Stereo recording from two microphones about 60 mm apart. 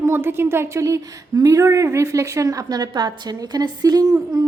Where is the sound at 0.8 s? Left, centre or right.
Right.